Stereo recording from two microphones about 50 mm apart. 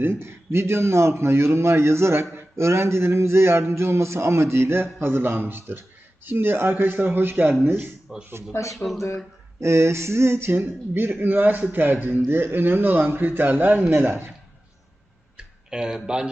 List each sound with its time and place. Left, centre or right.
0.0 s a sound: right
6.2 s a man's voice: right
8.1 s speech: centre
8.5 s speech: left
9.6 s a sound: right
10.5 s a man's voice: right
15.4 s speech: centre